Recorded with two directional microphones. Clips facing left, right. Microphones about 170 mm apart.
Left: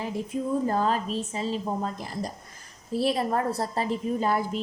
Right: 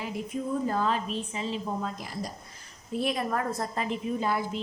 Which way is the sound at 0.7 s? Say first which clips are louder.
Left 3 dB; 40° left (ahead or behind).